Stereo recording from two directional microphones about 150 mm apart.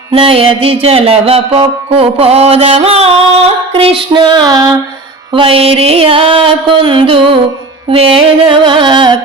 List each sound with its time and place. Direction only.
0.1 s music: 35° right (ahead or behind)
5.3 s music: 35° right (ahead or behind)